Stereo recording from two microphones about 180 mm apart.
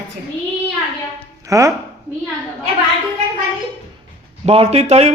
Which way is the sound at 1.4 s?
15° right (ahead or behind).